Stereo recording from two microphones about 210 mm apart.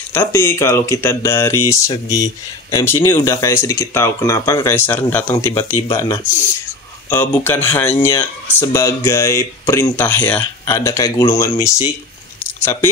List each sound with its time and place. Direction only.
0.1 s speech: 10° left (ahead or behind)